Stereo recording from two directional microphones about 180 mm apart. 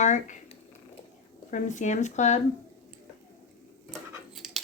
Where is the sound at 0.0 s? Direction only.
40° left (ahead or behind).